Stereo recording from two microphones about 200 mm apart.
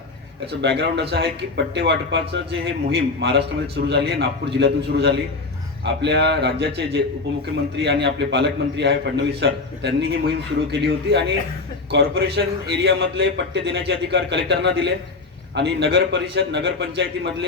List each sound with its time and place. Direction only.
0.6 s a man's voice: 55° right (ahead or behind)